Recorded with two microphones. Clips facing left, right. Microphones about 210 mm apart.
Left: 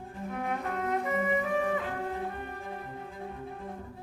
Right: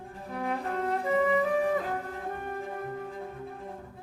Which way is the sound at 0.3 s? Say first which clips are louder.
Right 2 dB; 35° right (ahead or behind).